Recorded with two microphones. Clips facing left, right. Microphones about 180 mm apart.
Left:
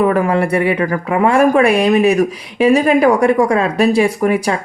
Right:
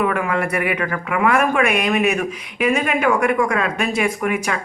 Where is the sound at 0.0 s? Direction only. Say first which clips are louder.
Left 6 dB; 35° left (ahead or behind).